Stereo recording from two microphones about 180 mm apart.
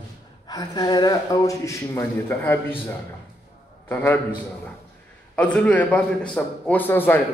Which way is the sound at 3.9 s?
10° left (ahead or behind).